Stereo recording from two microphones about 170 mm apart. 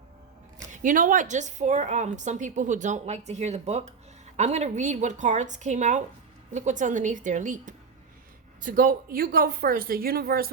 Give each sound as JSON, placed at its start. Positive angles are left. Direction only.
{"t": 0.7, "sound": "a woman's voice", "side_deg": -50}